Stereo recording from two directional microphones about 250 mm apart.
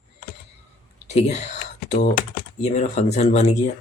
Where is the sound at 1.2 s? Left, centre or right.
Left.